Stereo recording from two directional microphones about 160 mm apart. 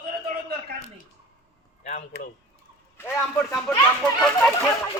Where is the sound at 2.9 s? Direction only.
15° left (ahead or behind).